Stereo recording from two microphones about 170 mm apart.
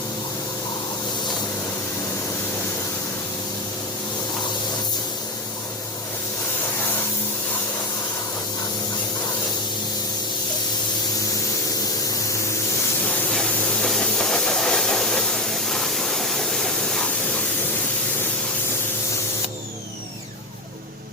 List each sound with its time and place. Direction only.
13.3 s steam: 5° left (ahead or behind)